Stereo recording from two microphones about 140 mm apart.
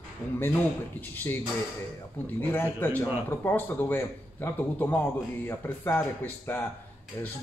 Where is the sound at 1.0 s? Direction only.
15° left (ahead or behind).